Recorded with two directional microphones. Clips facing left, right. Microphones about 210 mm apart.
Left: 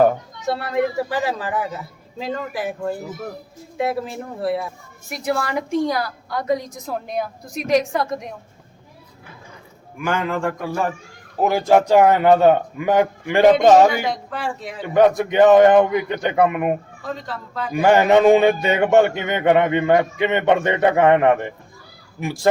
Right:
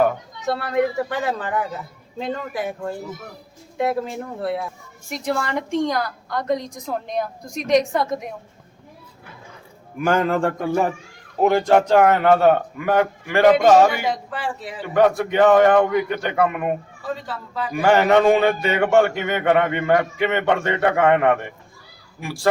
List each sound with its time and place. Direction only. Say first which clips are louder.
0.4 s a woman's voice: even; centre (ahead or behind)
10.0 s a man's voice: right 3 dB; 40° right (ahead or behind)
11.3 s a man's voice: even; 5° left (ahead or behind); by 13.9 s 20° left (ahead or behind)
14.1 s a woman's voice: even; 5° right (ahead or behind)
14.9 s a man's voice: left 2 dB; 20° left (ahead or behind)
17.0 s a woman's voice: even; 5° right (ahead or behind)
17.7 s a man's voice: left 2 dB; 20° left (ahead or behind)